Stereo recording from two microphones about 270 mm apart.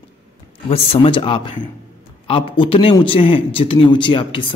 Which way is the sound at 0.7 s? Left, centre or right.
Centre.